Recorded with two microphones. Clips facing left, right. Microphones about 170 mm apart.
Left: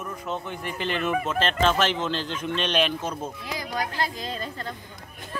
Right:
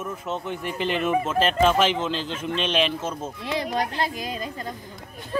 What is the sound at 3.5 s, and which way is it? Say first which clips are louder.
Speech: right 6 dB; 25° right (ahead or behind).